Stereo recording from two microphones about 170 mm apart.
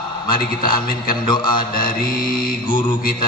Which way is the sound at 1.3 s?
25° left (ahead or behind).